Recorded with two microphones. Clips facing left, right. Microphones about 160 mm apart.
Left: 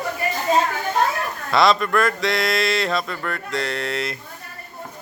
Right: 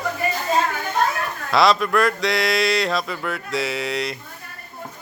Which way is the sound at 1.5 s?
Centre (ahead or behind).